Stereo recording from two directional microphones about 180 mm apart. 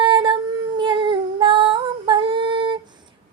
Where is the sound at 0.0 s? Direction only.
25° right (ahead or behind).